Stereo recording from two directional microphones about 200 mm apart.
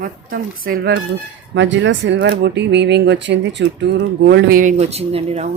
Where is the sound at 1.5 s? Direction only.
65° right (ahead or behind).